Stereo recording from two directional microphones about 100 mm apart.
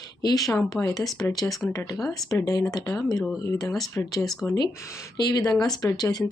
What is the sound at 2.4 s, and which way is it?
Speech, 35° left (ahead or behind).